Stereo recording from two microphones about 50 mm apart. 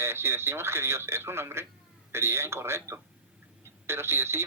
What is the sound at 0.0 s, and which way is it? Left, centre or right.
Speech, right.